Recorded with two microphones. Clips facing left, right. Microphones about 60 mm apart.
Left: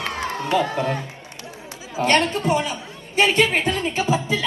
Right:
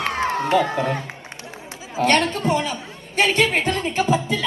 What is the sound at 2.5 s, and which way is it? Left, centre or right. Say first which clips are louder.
A woman's voice: even; centre.